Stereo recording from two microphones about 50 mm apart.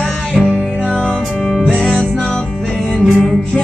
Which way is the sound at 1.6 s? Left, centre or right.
Centre.